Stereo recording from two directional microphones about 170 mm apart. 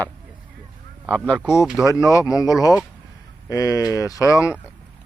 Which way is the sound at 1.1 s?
5° left (ahead or behind).